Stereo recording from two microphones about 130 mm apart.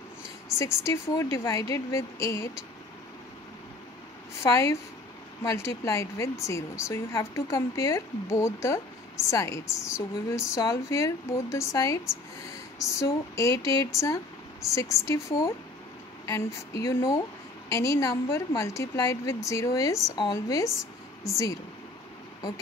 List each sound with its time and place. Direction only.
0.8 s speech: 25° left (ahead or behind)
4.4 s a woman's voice: 25° left (ahead or behind)